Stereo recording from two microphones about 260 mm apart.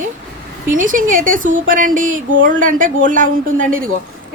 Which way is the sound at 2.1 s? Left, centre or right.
Right.